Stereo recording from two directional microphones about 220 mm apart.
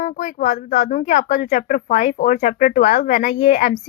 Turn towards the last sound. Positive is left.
turn(degrees=35)  # may be behind; listen again after turning